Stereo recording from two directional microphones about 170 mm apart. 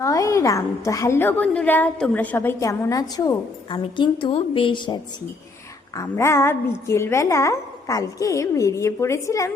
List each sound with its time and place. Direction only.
0.0 s a woman's voice: 20° left (ahead or behind)
6.0 s a woman's voice: 15° left (ahead or behind)